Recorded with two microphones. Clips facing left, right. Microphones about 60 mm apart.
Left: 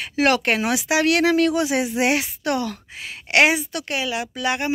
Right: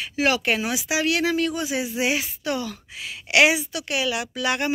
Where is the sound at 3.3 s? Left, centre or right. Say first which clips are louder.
Left 1 dB; left.